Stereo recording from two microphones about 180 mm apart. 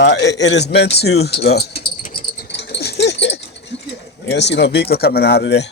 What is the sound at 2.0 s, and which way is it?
Rattle, 55° left (ahead or behind).